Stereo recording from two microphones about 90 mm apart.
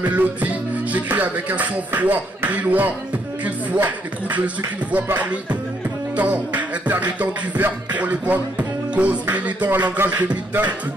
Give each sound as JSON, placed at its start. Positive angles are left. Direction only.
{"t": 0.0, "sound": "music", "side_deg": -15}